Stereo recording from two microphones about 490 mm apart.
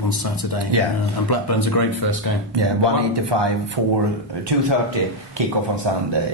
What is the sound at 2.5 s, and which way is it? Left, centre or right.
Speech, right.